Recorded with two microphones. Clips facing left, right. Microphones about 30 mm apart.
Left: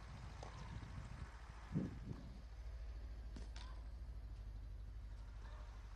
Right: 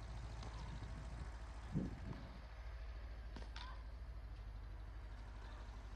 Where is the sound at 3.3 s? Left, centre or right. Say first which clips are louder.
Right 5 dB; right.